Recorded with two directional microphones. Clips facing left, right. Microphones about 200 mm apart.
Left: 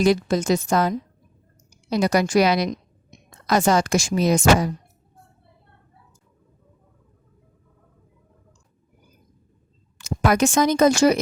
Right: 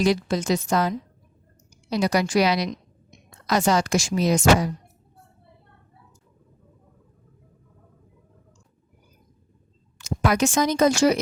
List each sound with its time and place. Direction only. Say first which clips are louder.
0.0 s speech: left 3 dB; 50° left (ahead or behind)
10.0 s speech: left 2 dB; 50° left (ahead or behind)